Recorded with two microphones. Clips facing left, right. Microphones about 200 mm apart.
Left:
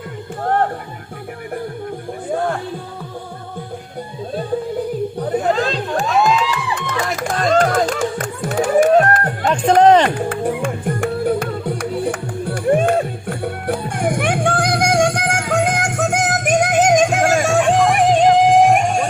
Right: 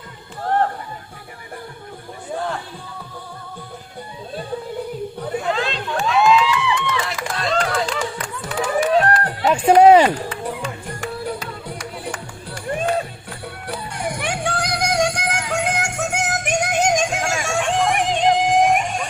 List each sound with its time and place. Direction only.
5.4 s music: 40° left (ahead or behind)
9.5 s a sound: 10° right (ahead or behind)
10.2 s music: 50° left (ahead or behind)
17.4 s music: 40° left (ahead or behind)